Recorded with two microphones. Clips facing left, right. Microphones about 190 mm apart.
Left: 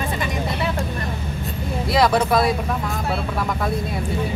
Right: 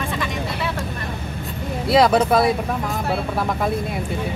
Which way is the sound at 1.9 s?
25° right (ahead or behind).